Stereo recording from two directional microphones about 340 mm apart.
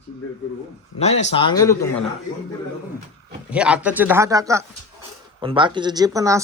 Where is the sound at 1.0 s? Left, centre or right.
Centre.